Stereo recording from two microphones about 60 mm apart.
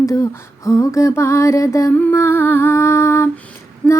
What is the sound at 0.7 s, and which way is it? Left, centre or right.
Mantra, left.